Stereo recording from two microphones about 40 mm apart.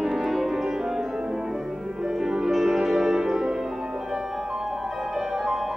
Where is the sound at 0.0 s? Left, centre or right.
Centre.